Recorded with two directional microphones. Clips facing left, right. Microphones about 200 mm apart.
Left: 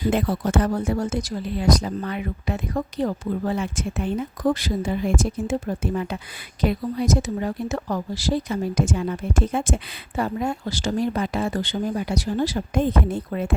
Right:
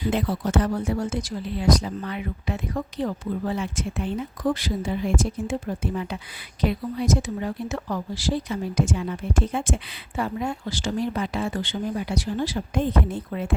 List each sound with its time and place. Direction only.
0.0 s speech: 50° left (ahead or behind)